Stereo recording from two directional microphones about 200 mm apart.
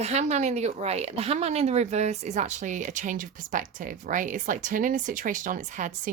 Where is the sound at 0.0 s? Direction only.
35° right (ahead or behind).